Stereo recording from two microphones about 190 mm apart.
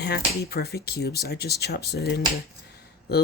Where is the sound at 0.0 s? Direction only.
60° left (ahead or behind).